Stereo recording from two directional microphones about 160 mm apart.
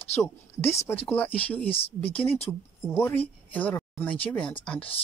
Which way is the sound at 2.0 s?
35° left (ahead or behind).